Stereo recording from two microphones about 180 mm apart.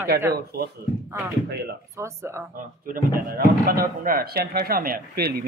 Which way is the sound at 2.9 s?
55° right (ahead or behind).